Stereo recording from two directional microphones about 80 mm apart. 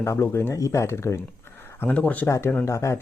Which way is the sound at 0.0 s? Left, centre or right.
Left.